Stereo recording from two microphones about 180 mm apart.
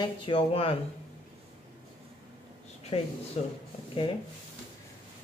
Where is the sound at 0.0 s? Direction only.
30° left (ahead or behind).